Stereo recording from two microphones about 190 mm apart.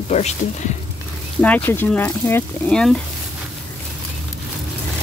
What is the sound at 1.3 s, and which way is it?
Speech, 10° left (ahead or behind).